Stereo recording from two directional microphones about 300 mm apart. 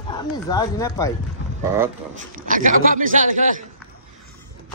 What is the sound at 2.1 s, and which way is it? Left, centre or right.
Speech, right.